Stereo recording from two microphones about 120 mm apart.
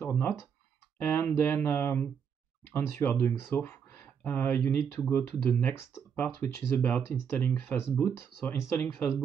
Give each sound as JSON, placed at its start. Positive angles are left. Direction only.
{"t": 0.0, "sound": "speech", "side_deg": 15}